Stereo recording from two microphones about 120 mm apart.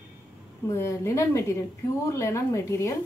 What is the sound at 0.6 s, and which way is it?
Speech, 25° left (ahead or behind).